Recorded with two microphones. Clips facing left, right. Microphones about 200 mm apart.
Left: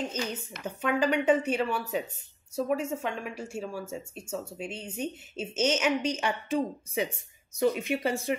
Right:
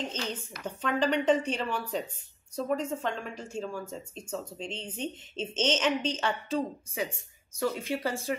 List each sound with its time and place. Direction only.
0.1 s speech: 10° left (ahead or behind)